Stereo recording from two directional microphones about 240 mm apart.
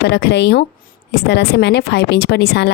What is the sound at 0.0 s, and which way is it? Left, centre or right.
A woman's voice, left.